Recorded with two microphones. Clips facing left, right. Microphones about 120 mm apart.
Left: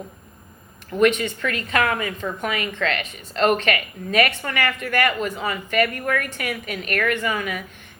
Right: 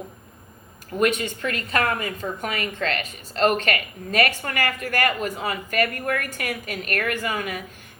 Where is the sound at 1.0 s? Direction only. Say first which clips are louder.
Left 3 dB; 40° right (ahead or behind).